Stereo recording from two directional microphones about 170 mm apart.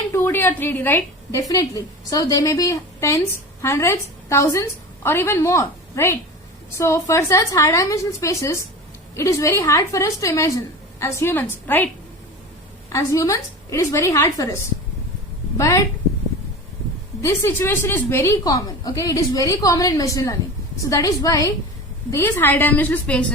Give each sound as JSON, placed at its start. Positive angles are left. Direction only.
{"t": 0.1, "sound": "a woman's voice", "side_deg": 15}
{"t": 12.9, "sound": "a woman's voice", "side_deg": 15}
{"t": 17.2, "sound": "a woman's voice", "side_deg": 15}